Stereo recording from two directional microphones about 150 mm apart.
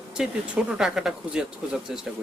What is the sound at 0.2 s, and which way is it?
Speech, 5° right (ahead or behind).